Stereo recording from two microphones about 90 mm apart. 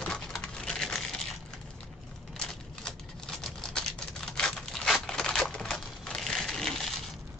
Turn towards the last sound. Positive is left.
turn(degrees=5)  # may be behind; listen again after turning